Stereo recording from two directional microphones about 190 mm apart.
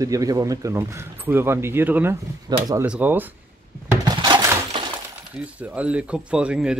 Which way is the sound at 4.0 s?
20° right (ahead or behind).